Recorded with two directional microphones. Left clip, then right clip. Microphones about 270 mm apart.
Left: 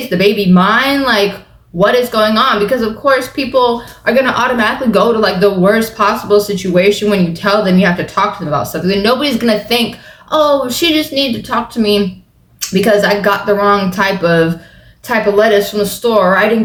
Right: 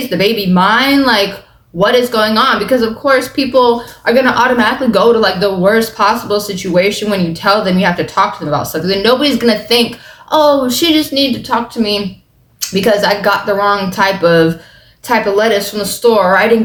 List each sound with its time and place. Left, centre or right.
0.1 s speech: centre